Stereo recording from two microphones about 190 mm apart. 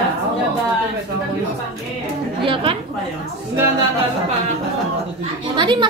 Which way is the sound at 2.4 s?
30° right (ahead or behind).